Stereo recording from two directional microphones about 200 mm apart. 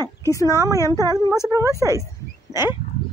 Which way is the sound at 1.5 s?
15° right (ahead or behind).